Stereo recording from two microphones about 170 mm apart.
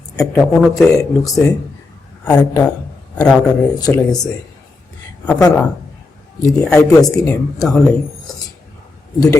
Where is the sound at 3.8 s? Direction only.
20° left (ahead or behind).